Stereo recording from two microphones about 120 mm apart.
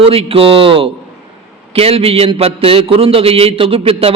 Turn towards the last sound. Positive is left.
turn(degrees=-50)  # may be behind; listen again after turning